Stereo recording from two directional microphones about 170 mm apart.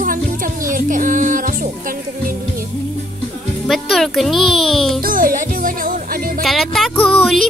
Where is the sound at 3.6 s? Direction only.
Centre (ahead or behind).